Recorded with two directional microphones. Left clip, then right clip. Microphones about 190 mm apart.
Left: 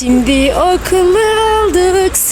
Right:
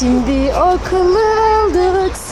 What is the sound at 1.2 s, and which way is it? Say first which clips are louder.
Music: left 2 dB; 5° left (ahead or behind).